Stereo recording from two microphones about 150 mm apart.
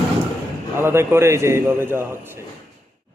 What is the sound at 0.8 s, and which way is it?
Speech, 15° right (ahead or behind).